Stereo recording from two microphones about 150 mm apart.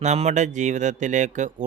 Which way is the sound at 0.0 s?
45° right (ahead or behind).